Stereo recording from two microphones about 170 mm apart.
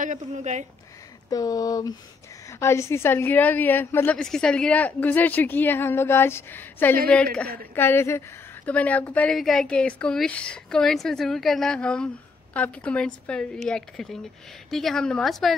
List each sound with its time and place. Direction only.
0.0 s speech: 45° right (ahead or behind)
1.3 s a woman's voice: 20° left (ahead or behind); by 15.5 s centre (ahead or behind)